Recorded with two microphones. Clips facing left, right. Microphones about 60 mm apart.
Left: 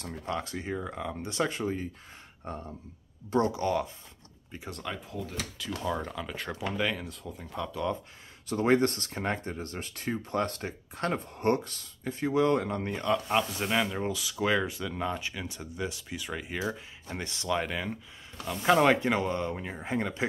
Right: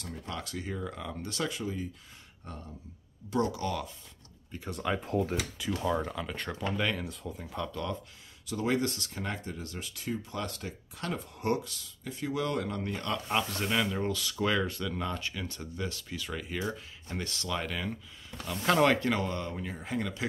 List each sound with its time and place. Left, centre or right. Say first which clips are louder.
0.0 s speech: left 5 dB; left
1.5 s speech: left 4 dB; left
4.6 s speech: right 4 dB; centre
5.0 s speech: right 8 dB; right
5.3 s speech: right 4 dB; centre
5.8 s speech: right 1 dB; centre
8.5 s speech: left 5 dB; left
13.0 s speech: left 5 dB; centre; by 20.2 s left